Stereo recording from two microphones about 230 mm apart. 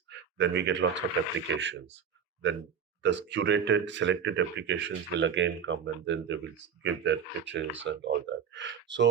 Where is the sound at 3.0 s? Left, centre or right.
Right.